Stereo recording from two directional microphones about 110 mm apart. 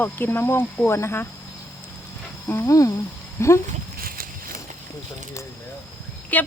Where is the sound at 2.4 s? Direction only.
25° left (ahead or behind).